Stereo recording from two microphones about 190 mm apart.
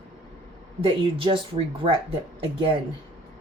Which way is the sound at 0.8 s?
30° right (ahead or behind).